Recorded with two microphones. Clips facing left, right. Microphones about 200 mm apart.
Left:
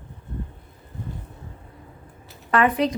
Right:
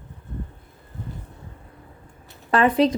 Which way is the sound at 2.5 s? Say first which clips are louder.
Right 2 dB; 30° right (ahead or behind).